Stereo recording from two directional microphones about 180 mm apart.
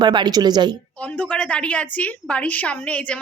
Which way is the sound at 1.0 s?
5° left (ahead or behind).